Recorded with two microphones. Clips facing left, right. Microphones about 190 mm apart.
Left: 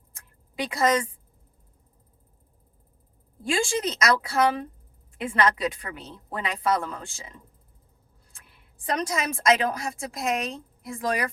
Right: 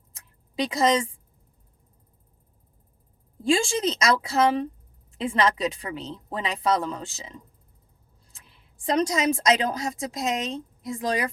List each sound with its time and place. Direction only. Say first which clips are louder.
0.7 s speech: right 1 dB; 25° right (ahead or behind)
3.4 s speech: right 3 dB; 25° right (ahead or behind)
8.4 s a woman's voice: right 3 dB; 25° right (ahead or behind)